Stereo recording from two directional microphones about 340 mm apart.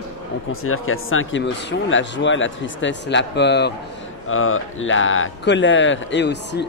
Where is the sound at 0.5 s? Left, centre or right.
Left.